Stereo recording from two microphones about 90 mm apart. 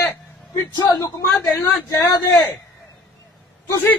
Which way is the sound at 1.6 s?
35° left (ahead or behind).